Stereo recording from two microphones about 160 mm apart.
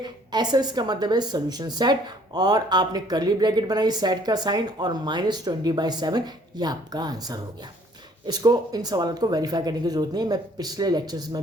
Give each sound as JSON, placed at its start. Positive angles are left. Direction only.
{"t": 0.0, "sound": "a woman's voice", "side_deg": -25}